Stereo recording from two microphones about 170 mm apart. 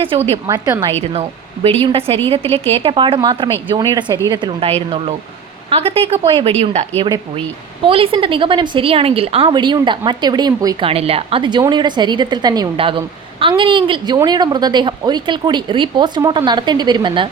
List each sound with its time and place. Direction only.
0.4 s a woman's voice: 20° right (ahead or behind)
1.1 s a woman's voice: 35° right (ahead or behind)
10.8 s a woman's voice: 35° right (ahead or behind)